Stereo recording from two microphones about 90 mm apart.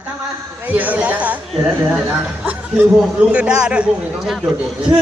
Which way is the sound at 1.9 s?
10° right (ahead or behind).